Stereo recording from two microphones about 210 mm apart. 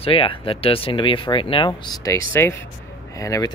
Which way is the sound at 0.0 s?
25° left (ahead or behind).